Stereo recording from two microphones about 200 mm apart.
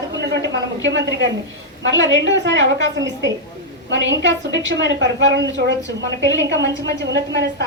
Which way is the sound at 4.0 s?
65° right (ahead or behind).